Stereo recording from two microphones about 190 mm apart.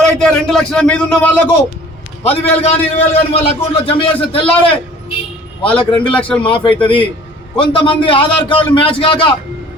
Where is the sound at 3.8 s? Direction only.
30° left (ahead or behind).